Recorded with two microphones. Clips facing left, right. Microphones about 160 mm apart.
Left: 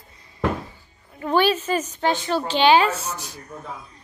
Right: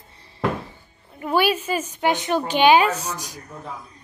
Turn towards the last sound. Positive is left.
turn(degrees=-15)  # may be behind; listen again after turning